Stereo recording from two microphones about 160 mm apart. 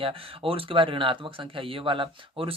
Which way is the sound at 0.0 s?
35° right (ahead or behind).